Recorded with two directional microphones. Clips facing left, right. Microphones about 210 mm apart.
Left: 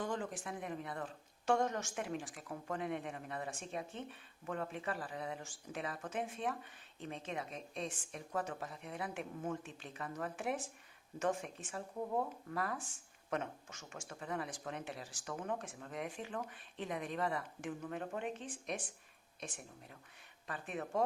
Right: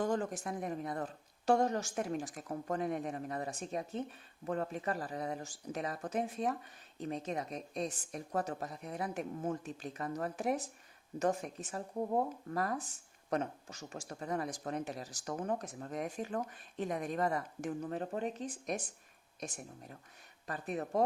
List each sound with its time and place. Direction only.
0.0 s speech: 45° right (ahead or behind)